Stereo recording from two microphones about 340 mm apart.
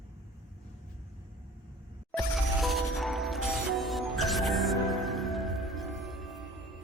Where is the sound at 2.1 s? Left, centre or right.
Centre.